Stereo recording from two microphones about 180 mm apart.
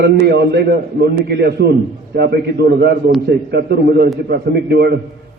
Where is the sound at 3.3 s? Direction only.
65° right (ahead or behind).